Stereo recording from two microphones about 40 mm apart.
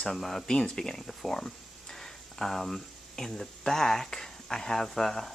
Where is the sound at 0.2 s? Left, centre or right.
Centre.